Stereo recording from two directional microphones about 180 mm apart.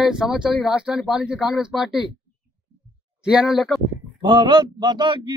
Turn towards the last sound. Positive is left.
turn(degrees=-25)  # may be behind; listen again after turning